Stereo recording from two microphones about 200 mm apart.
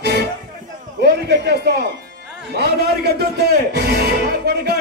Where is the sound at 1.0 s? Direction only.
55° right (ahead or behind).